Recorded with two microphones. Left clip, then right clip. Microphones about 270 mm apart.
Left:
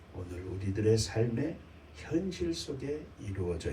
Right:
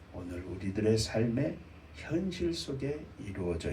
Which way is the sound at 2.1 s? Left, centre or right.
Left.